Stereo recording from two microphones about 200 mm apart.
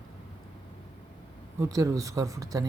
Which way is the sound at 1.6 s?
15° right (ahead or behind).